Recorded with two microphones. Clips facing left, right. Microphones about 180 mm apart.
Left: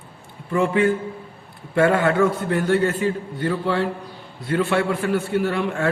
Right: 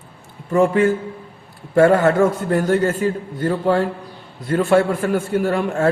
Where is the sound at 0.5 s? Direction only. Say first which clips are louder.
Right 4 dB; 40° right (ahead or behind).